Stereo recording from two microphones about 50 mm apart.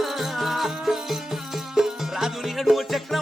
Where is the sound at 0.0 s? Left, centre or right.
Centre.